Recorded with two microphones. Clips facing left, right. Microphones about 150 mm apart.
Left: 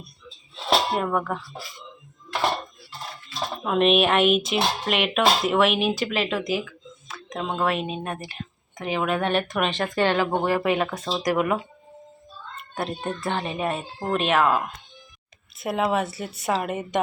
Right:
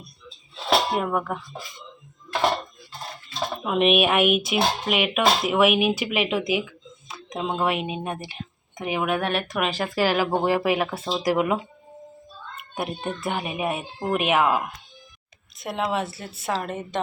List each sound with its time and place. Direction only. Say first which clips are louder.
0.9 s speech: even; 5° right (ahead or behind)
3.6 s speech: left 1 dB; 5° right (ahead or behind)
12.7 s speech: even; 10° right (ahead or behind)
15.5 s a woman's voice: left 3 dB; 5° left (ahead or behind)